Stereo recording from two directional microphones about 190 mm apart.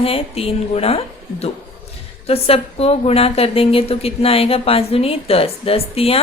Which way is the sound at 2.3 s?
30° left (ahead or behind).